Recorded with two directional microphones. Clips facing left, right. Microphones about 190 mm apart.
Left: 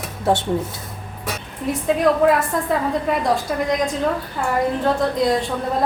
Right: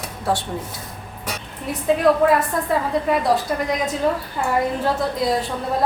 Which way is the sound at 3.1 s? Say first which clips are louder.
Right 3 dB; centre (ahead or behind).